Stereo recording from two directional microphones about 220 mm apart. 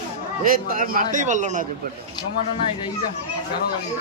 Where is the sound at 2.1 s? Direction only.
20° left (ahead or behind).